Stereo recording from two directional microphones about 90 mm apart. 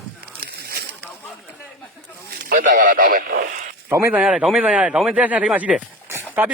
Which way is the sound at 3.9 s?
30° right (ahead or behind).